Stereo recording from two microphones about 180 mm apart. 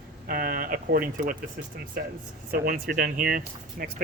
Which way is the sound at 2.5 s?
55° right (ahead or behind).